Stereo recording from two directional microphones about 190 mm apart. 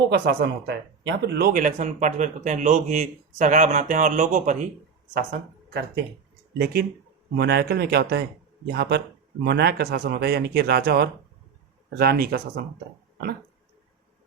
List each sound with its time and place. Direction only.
0.1 s speech: 55° right (ahead or behind)
5.1 s speech: 55° right (ahead or behind)
7.3 s speech: 60° right (ahead or behind)